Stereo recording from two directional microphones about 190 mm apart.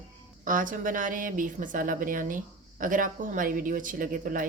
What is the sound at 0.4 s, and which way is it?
A woman's voice, 45° right (ahead or behind).